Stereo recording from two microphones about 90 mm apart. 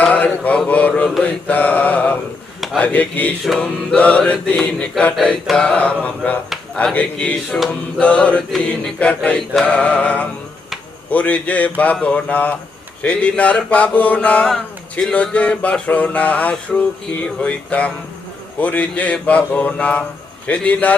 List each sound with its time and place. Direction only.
0.0 s mantra: 15° left (ahead or behind)
0.7 s speech: 15° left (ahead or behind)